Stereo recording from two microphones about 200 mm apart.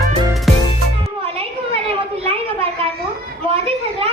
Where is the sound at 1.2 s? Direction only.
30° right (ahead or behind).